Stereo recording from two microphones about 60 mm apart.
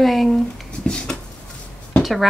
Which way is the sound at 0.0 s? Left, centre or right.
Centre.